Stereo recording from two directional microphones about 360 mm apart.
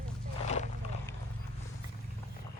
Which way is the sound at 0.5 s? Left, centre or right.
Centre.